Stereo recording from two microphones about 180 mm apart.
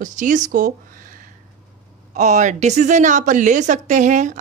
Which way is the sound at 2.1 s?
40° right (ahead or behind).